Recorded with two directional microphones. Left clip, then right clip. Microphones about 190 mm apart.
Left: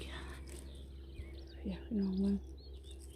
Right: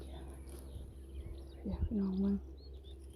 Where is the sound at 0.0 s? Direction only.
20° left (ahead or behind).